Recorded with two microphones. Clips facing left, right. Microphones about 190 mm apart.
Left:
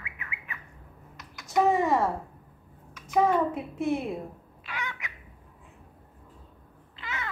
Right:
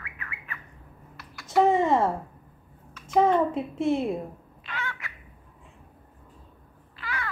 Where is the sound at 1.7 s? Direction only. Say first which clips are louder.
Right 2 dB; 25° right (ahead or behind).